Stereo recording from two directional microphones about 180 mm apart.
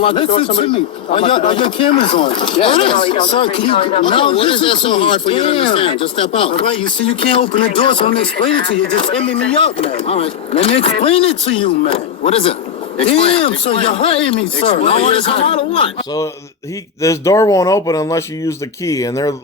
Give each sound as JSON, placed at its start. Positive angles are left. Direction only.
{"t": 0.0, "sound": "a man's voice", "side_deg": 30}
{"t": 17.0, "sound": "a man's voice", "side_deg": 15}